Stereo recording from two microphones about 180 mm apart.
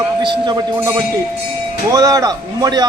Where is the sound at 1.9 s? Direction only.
20° right (ahead or behind).